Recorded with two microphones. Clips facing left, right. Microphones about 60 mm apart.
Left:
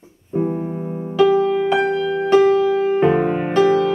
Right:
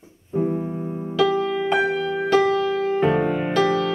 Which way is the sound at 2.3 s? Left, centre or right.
Left.